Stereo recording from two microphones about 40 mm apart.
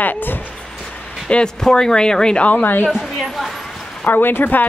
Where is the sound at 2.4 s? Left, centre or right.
Left.